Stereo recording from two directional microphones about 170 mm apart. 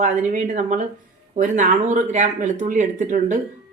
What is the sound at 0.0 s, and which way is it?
Speech, 50° right (ahead or behind).